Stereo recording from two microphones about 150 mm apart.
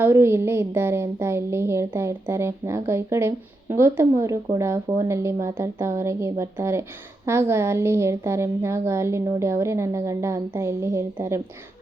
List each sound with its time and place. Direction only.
0.0 s a woman's voice: 15° right (ahead or behind)